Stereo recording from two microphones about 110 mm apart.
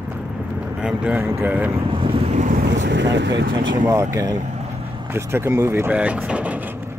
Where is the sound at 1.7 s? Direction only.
55° right (ahead or behind); by 2.8 s 90° right.